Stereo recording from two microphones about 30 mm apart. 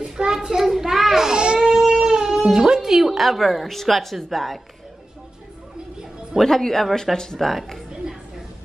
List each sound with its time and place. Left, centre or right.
0.3 s child singing: centre
1.1 s baby cry: centre
1.6 s guitar: centre
2.0 s a sound: centre
2.5 s a woman's voice: right; by 4.6 s centre
6.4 s a woman's voice: centre